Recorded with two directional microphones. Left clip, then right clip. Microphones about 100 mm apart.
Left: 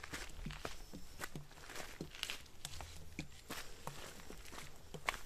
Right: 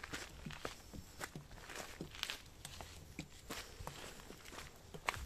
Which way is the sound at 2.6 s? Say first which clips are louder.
Left 1 dB; 35° left (ahead or behind).